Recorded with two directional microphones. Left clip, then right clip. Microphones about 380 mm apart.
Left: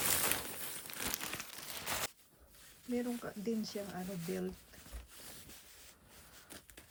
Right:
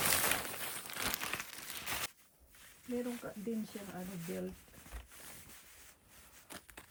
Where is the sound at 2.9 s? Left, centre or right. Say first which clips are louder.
Left 1 dB; centre.